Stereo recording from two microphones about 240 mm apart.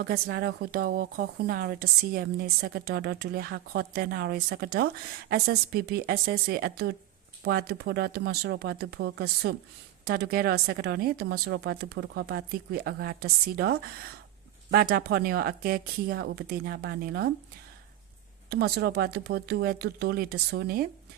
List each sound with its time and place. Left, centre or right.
0.0 s a woman's voice: right
18.4 s a woman's voice: right